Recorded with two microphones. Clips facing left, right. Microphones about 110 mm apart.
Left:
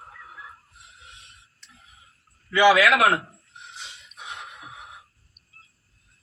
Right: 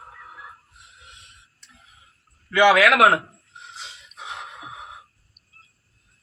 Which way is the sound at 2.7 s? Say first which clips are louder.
Right 3 dB; 70° right (ahead or behind).